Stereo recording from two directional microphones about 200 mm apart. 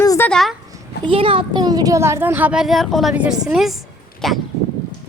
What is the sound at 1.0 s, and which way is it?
Speech, 25° right (ahead or behind).